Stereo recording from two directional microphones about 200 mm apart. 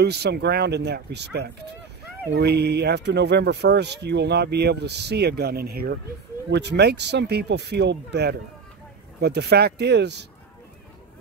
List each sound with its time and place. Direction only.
0.0 s speech: 55° right (ahead or behind)